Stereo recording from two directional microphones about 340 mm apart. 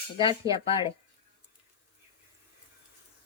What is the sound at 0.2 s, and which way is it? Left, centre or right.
Speech, centre.